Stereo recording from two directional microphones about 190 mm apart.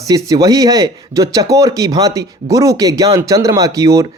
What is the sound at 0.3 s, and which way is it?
Speech, 20° right (ahead or behind).